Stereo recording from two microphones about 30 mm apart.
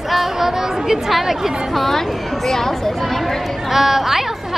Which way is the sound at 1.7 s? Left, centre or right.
Centre.